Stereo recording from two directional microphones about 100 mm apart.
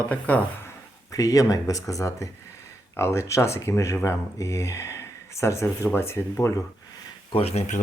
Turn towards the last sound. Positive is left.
turn(degrees=85)